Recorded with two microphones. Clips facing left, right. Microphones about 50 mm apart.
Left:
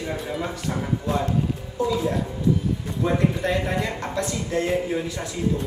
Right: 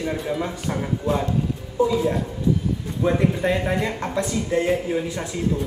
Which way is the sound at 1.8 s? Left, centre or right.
Right.